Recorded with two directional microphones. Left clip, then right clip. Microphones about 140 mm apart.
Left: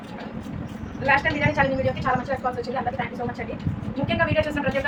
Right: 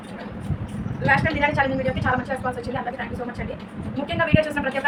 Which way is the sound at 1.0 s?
20° right (ahead or behind).